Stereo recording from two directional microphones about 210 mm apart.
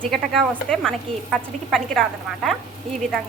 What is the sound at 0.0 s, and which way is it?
A woman's voice, 5° left (ahead or behind).